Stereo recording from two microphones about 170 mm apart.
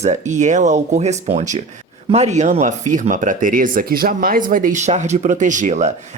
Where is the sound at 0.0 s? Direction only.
45° right (ahead or behind).